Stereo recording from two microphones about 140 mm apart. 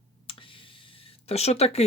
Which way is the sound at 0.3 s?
40° left (ahead or behind).